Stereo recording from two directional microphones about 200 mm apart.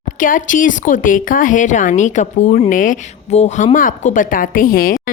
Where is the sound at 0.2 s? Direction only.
40° left (ahead or behind).